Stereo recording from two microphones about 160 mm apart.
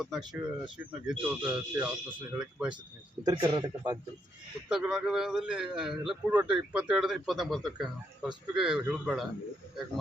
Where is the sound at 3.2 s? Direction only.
30° right (ahead or behind).